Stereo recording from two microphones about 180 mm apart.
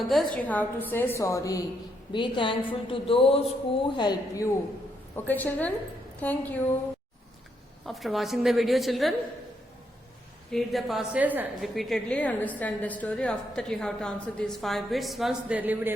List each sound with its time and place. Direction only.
0.0 s a woman's voice: centre (ahead or behind); by 4.4 s 25° left (ahead or behind)
5.1 s a woman's voice: 10° left (ahead or behind)
7.9 s a woman's voice: centre (ahead or behind)
10.5 s a woman's voice: centre (ahead or behind)